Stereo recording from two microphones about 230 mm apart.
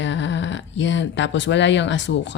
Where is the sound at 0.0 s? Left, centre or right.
Left.